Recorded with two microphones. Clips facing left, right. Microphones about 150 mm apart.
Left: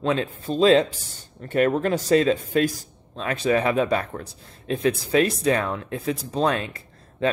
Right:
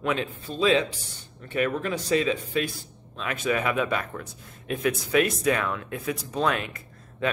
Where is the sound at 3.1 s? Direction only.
35° left (ahead or behind).